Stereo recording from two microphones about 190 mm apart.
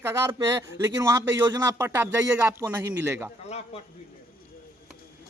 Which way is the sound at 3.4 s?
35° left (ahead or behind).